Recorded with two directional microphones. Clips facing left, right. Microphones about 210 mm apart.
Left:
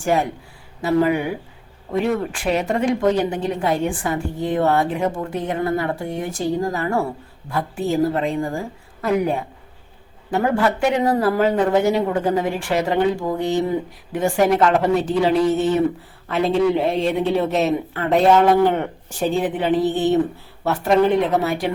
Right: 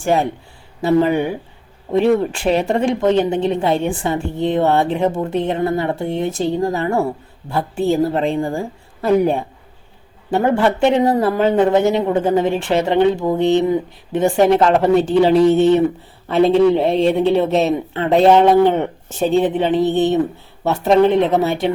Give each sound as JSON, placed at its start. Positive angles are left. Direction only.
{"t": 0.0, "sound": "speech", "side_deg": -25}